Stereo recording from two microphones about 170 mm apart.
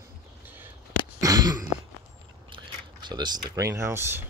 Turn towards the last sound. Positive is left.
turn(degrees=-15)  # may be behind; listen again after turning